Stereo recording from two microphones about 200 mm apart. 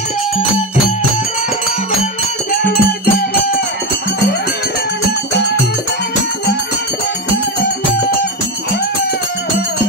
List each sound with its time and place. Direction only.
2.5 s music: 45° left (ahead or behind)